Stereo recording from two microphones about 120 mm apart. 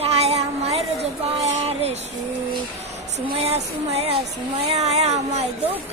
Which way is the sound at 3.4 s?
60° right (ahead or behind).